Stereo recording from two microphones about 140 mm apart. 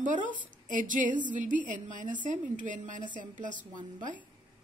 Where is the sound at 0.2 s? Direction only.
35° left (ahead or behind).